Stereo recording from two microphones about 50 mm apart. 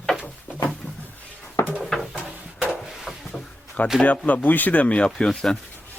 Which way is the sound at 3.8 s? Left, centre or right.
Left.